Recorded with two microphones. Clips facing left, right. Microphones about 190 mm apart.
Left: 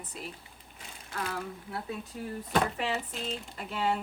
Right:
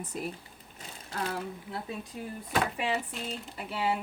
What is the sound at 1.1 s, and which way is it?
Speech, 35° right (ahead or behind).